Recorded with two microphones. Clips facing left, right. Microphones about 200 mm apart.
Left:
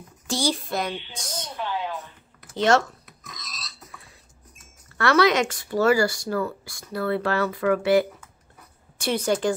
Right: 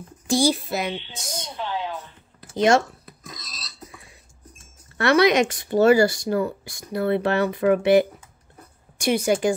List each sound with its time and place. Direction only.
0.3 s a child's voice: 10° right (ahead or behind)
2.5 s speech: 15° right (ahead or behind)
3.1 s burping: 30° right (ahead or behind)
4.6 s a woman's voice: 20° right (ahead or behind)